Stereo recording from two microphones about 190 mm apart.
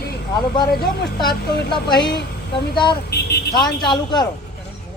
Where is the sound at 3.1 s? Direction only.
60° left (ahead or behind).